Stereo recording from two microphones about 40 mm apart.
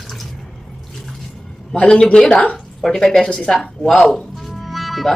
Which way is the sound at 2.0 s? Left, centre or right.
Left.